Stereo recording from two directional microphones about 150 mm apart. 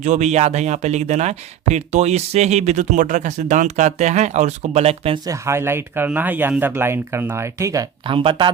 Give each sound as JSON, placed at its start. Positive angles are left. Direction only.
{"t": 0.0, "sound": "speech", "side_deg": -50}
{"t": 5.2, "sound": "speech", "side_deg": -20}
{"t": 8.0, "sound": "speech", "side_deg": -35}